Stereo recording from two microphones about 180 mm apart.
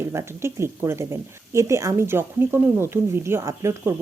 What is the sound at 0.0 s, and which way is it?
Speech, 15° right (ahead or behind).